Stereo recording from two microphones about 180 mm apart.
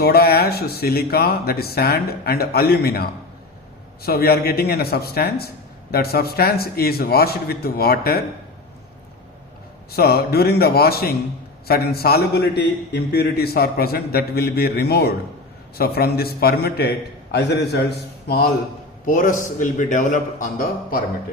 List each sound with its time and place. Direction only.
0.0 s a man's voice: 60° left (ahead or behind)
4.0 s a man's voice: 60° left (ahead or behind)
9.9 s a man's voice: 60° left (ahead or behind)
19.0 s a man's voice: 50° left (ahead or behind)